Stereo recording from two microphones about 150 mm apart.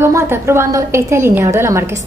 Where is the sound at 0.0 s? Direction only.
15° right (ahead or behind).